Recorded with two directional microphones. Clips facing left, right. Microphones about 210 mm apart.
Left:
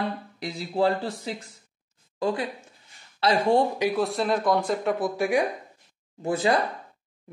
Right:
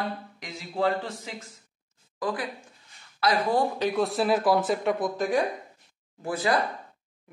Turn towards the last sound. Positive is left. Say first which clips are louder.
# left 3 dB
turn(degrees=25)  # may be behind; listen again after turning